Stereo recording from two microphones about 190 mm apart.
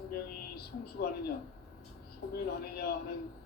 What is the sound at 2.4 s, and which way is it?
Speech, 55° left (ahead or behind).